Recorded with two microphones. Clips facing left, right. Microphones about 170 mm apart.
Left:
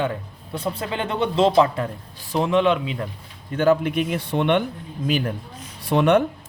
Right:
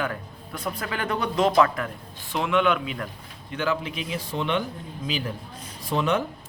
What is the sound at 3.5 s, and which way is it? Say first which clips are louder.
Speech: left 9 dB; 50° left (ahead or behind).